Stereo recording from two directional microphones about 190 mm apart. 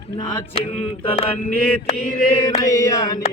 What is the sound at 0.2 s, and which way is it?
Mantra, 30° left (ahead or behind).